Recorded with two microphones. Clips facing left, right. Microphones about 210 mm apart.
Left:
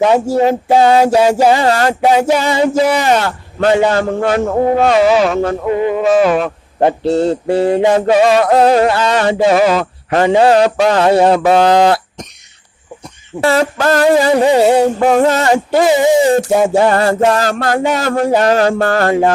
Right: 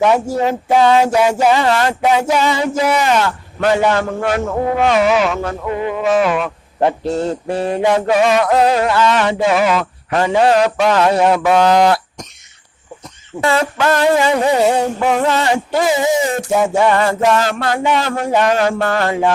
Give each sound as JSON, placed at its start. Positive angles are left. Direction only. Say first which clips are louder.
{"t": 0.0, "sound": "mantra", "louder": "left 3 dB", "side_deg": 30}
{"t": 13.4, "sound": "mantra", "louder": "left 3 dB", "side_deg": 35}
{"t": 15.7, "sound": "mantra", "louder": "left 6 dB", "side_deg": 30}